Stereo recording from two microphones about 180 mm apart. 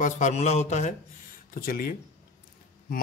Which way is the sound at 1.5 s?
50° left (ahead or behind).